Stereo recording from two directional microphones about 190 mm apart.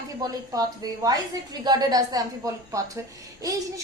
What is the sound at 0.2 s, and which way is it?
A woman's voice, 20° right (ahead or behind).